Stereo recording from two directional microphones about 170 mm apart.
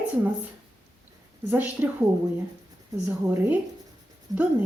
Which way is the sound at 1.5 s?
10° right (ahead or behind).